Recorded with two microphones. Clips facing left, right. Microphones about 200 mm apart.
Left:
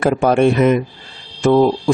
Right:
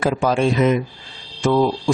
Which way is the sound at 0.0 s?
60° left (ahead or behind).